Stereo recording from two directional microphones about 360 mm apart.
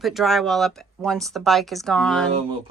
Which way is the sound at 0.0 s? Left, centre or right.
Centre.